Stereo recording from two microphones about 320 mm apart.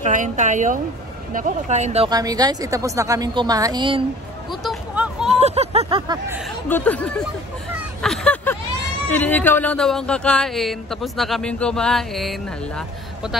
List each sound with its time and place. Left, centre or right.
0.0 s speech: right
4.5 s speech: centre
5.3 s speech: centre
6.7 s speech: centre
8.0 s a sound: centre
9.1 s speech: centre